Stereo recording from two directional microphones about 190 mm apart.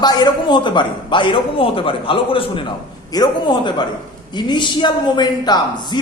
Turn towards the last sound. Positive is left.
turn(degrees=20)  # may be behind; listen again after turning